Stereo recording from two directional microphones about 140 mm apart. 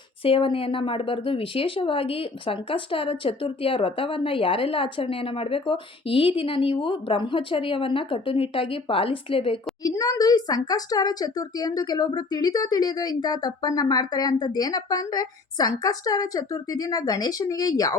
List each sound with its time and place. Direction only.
0.2 s speech: 40° left (ahead or behind)
9.8 s a woman's voice: 25° left (ahead or behind)